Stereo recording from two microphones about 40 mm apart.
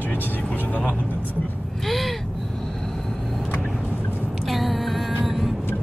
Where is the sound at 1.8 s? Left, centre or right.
Centre.